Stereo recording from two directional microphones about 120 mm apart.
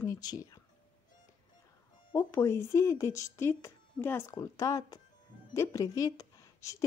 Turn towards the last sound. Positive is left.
turn(degrees=25)  # may be behind; listen again after turning